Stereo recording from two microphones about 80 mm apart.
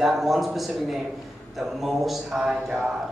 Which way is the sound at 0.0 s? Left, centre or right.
Centre.